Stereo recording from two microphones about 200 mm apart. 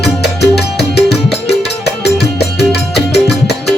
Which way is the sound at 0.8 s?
55° left (ahead or behind).